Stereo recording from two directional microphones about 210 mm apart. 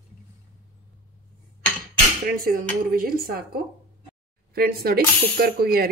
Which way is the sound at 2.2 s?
45° right (ahead or behind).